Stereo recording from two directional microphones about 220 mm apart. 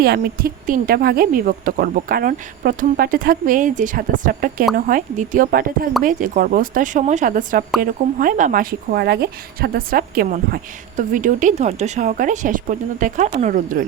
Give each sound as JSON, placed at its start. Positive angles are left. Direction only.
{"t": 0.0, "sound": "speech", "side_deg": -45}